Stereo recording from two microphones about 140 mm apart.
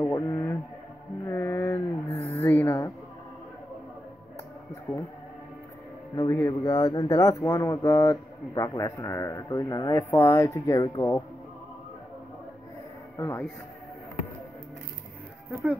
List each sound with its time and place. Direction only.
0.0 s a sound: 20° left (ahead or behind)
1.2 s mantra: 20° left (ahead or behind)
2.4 s a sound: 20° left (ahead or behind)
4.9 s speech: 15° left (ahead or behind)
6.1 s a man's voice: 25° left (ahead or behind)
13.2 s speech: 15° left (ahead or behind)
15.5 s speech: 5° right (ahead or behind)